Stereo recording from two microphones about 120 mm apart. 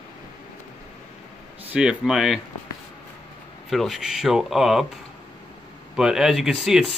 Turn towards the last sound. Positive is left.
turn(degrees=-5)  # may be behind; listen again after turning